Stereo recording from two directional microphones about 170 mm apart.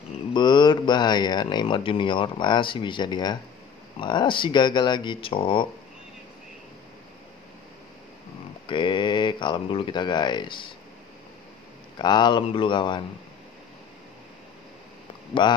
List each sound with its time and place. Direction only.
0.3 s speech: 25° left (ahead or behind)
8.6 s speech: 30° left (ahead or behind)
12.0 s speech: 25° left (ahead or behind)
15.4 s speech: 25° left (ahead or behind)